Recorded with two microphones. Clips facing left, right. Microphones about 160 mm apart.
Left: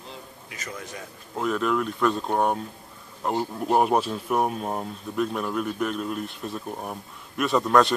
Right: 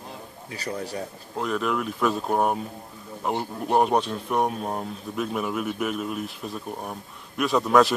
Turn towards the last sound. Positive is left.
turn(degrees=0)  # may be behind; listen again after turning